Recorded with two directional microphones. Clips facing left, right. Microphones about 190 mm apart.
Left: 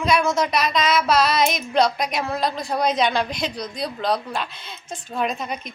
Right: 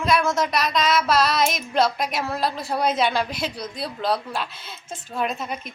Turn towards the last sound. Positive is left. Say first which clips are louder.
# left 1 dB
turn(degrees=-5)  # may be behind; listen again after turning